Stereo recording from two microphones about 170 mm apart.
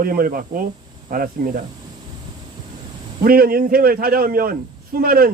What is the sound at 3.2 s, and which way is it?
A man's voice, 60° right (ahead or behind).